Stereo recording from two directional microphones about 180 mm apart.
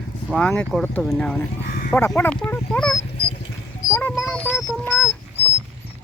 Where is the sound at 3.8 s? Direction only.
90° left.